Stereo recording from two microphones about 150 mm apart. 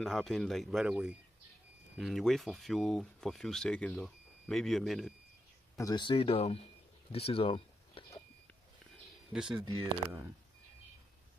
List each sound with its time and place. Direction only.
0.0 s speech: centre (ahead or behind)
5.8 s speech: 25° left (ahead or behind)
9.3 s speech: 5° right (ahead or behind)